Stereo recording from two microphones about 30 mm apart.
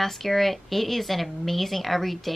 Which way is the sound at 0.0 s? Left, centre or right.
Centre.